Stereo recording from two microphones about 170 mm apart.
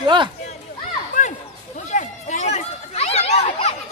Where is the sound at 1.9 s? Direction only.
45° left (ahead or behind).